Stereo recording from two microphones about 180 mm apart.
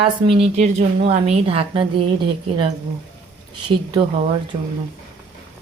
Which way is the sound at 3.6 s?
25° right (ahead or behind).